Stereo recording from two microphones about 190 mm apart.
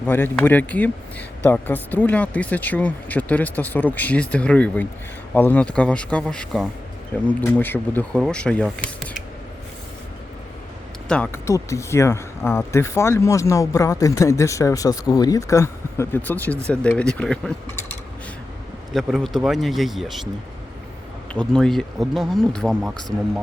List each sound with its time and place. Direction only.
0.0 s speech: 10° left (ahead or behind)
11.1 s speech: 10° left (ahead or behind)
18.9 s speech: centre (ahead or behind)
21.3 s speech: 5° left (ahead or behind)